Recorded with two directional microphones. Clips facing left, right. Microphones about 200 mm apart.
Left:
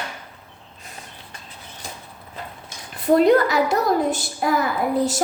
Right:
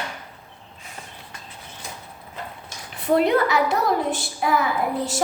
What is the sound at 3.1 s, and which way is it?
A woman's voice, 40° left (ahead or behind).